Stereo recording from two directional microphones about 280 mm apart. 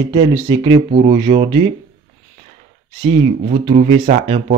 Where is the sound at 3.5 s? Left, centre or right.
Centre.